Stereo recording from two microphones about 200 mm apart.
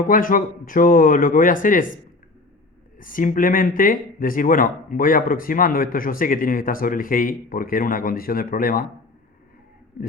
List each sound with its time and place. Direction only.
0.0 s speech: 45° left (ahead or behind)
3.0 s speech: 45° left (ahead or behind)